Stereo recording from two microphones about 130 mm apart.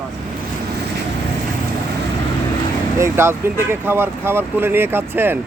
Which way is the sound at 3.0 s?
20° right (ahead or behind).